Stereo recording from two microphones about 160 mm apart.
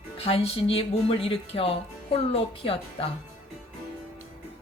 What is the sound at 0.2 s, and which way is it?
A woman's voice, 35° left (ahead or behind).